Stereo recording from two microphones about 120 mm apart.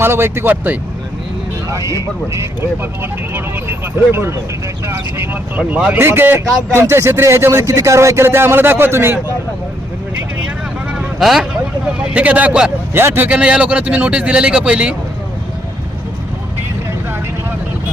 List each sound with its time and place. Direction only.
0.0 s a man's voice: 20° right (ahead or behind)
1.7 s speech: 25° right (ahead or behind)
10.9 s vehicle: 5° right (ahead or behind)
12.1 s a man's voice: 10° right (ahead or behind)